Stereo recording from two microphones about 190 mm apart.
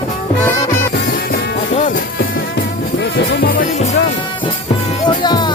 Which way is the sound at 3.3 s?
55° left (ahead or behind).